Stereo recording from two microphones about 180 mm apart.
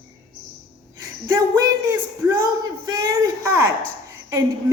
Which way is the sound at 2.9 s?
20° right (ahead or behind).